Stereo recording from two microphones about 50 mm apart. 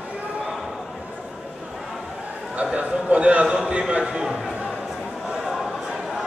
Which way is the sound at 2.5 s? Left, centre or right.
Right.